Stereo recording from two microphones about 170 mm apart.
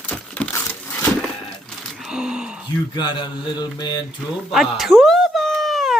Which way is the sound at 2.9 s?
25° left (ahead or behind).